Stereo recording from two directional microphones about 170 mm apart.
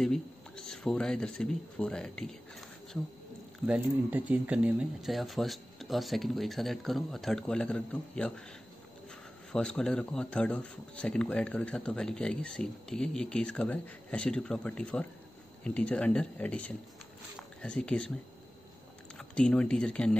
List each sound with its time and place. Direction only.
0.0 s speech: 5° left (ahead or behind)
3.6 s speech: 5° right (ahead or behind)
9.5 s speech: 5° left (ahead or behind)
19.1 s speech: 5° left (ahead or behind)